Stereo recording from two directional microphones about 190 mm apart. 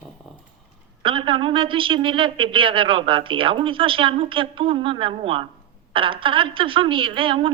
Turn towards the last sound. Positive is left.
turn(degrees=-25)  # may be behind; listen again after turning